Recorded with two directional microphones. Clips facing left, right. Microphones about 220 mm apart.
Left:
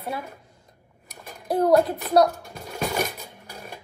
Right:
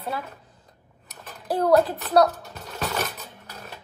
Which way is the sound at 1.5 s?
25° left (ahead or behind).